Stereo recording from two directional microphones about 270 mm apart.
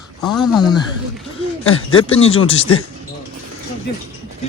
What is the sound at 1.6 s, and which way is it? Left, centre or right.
Speech, left.